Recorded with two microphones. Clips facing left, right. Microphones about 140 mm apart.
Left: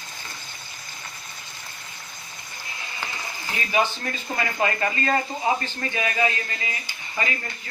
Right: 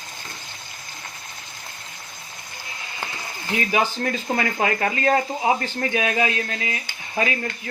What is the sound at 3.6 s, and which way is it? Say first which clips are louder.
Speech: right 2 dB; 80° right.